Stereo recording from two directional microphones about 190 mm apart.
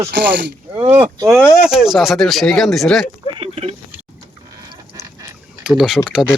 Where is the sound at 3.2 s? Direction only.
30° right (ahead or behind).